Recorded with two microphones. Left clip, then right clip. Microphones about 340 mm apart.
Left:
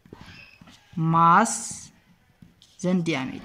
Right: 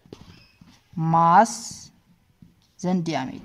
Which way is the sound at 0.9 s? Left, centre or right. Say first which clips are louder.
Right 2 dB; right.